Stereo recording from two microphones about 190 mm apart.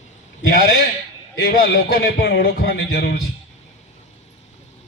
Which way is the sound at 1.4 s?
55° left (ahead or behind).